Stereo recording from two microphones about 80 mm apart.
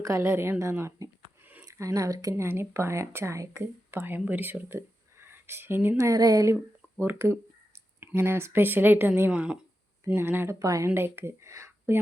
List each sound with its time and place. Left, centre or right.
0.0 s speech: right
2.3 s speech: right
5.2 s a sound: right
6.0 s speech: right
7.0 s speech: right
9.3 s speech: centre
10.1 s speech: right
10.6 s speech: right
10.8 s speech: right